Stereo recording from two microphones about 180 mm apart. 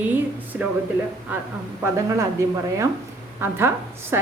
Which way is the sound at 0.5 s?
5° right (ahead or behind).